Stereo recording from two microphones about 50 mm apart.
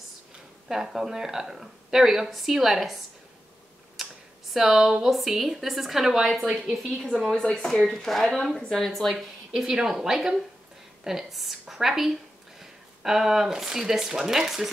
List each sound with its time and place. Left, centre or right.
0.7 s a woman's voice: centre
4.0 s computer keyboard: centre
4.6 s a woman's voice: centre
6.4 s a woman's voice: right
7.0 s a woman's voice: centre
7.5 s a woman's voice: centre
9.5 s a woman's voice: centre